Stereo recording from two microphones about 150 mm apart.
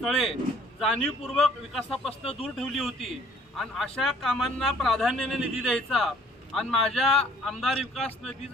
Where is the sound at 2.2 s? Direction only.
40° left (ahead or behind).